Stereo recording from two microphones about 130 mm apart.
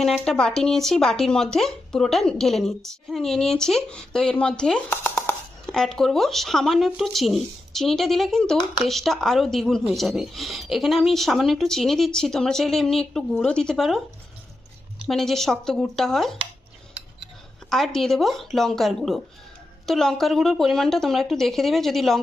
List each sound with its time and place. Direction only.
0.0 s speech: 5° left (ahead or behind)
15.0 s speech: 5° left (ahead or behind)
17.7 s speech: 5° left (ahead or behind)